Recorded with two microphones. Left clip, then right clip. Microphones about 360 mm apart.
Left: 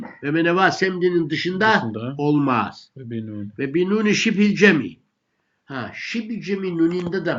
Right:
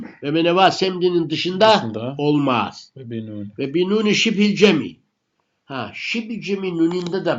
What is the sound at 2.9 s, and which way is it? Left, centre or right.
Speech, centre.